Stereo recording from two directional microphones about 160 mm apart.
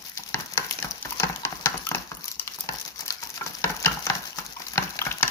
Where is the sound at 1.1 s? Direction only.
15° left (ahead or behind).